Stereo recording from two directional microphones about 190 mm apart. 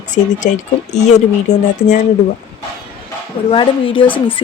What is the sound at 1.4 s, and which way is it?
Speech, 35° left (ahead or behind).